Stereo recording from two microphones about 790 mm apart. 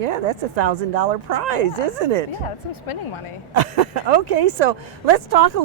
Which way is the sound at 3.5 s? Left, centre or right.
Right.